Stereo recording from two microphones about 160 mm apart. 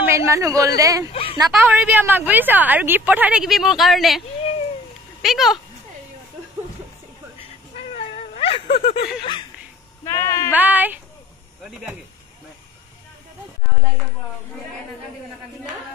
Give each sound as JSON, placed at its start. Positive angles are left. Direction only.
{"t": 0.0, "sound": "a woman's voice", "side_deg": -15}
{"t": 1.1, "sound": "a sound", "side_deg": 35}
{"t": 1.5, "sound": "a woman's voice", "side_deg": -5}
{"t": 5.2, "sound": "speech", "side_deg": 0}
{"t": 7.7, "sound": "cat", "side_deg": 40}
{"t": 10.0, "sound": "speech", "side_deg": 15}
{"t": 10.5, "sound": "a woman's voice", "side_deg": -10}